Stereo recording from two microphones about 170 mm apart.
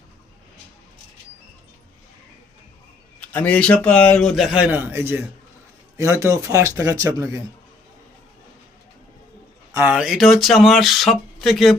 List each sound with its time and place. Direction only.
3.2 s a man's voice: 10° left (ahead or behind); by 7.4 s 20° right (ahead or behind)
9.7 s speech: 10° right (ahead or behind)